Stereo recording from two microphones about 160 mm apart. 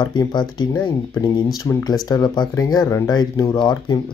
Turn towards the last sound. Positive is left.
turn(degrees=25)  # may be behind; listen again after turning